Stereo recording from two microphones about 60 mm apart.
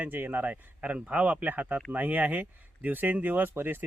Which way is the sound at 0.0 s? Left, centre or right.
Right.